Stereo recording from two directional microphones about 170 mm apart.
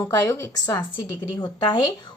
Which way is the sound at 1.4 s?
25° left (ahead or behind).